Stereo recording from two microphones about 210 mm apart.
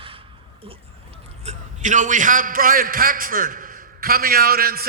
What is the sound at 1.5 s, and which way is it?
A man's voice, 35° right (ahead or behind).